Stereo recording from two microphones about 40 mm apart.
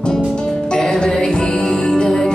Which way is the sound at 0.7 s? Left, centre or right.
Centre.